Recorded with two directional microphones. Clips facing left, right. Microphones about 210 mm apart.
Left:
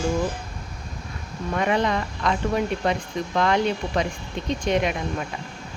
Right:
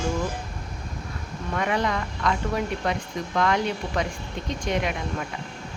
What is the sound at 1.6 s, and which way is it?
Speech, 25° left (ahead or behind).